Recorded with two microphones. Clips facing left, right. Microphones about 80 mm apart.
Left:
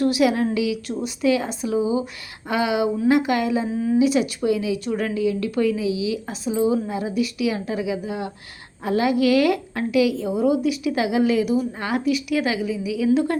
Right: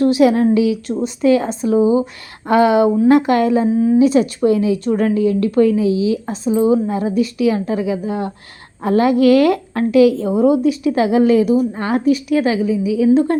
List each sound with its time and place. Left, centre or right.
0.0 s a woman's voice: right